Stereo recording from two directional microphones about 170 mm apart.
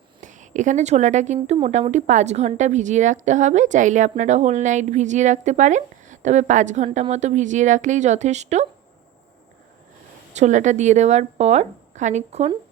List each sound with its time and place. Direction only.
0.2 s speech: 45° right (ahead or behind)
10.3 s speech: 45° right (ahead or behind)